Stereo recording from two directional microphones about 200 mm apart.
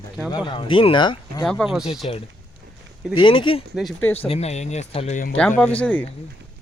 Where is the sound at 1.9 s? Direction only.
30° left (ahead or behind).